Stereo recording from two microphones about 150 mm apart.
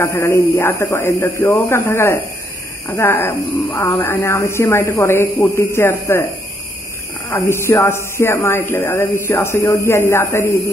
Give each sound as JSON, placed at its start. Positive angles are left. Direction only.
{"t": 0.0, "sound": "speech", "side_deg": 15}
{"t": 7.2, "sound": "speech", "side_deg": 15}